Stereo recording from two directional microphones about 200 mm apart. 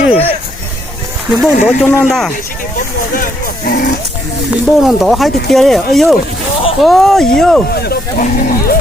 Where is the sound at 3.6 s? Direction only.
45° left (ahead or behind).